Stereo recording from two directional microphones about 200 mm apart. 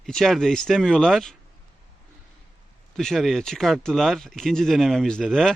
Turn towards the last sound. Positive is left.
turn(degrees=0)  # may be behind; listen again after turning